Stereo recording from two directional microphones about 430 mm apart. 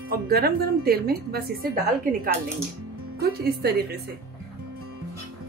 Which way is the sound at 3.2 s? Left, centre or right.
Right.